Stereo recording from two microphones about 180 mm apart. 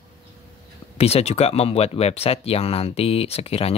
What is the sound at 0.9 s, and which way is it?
Speech, 35° left (ahead or behind).